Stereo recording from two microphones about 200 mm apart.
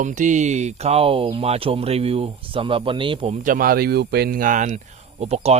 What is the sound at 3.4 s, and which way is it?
Speech, 45° right (ahead or behind).